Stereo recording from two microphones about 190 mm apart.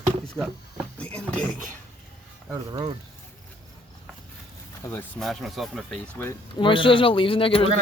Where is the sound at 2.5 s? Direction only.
20° right (ahead or behind).